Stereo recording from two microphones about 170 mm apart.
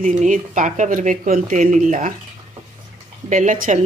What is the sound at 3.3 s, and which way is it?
Speech, 50° right (ahead or behind).